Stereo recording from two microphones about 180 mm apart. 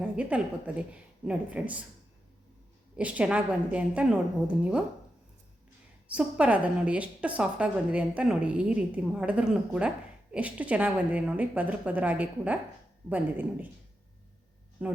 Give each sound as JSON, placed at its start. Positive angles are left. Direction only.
{"t": 0.0, "sound": "a woman's voice", "side_deg": -5}
{"t": 2.9, "sound": "a woman's voice", "side_deg": -5}
{"t": 6.1, "sound": "a woman's voice", "side_deg": -5}
{"t": 14.8, "sound": "speech", "side_deg": -10}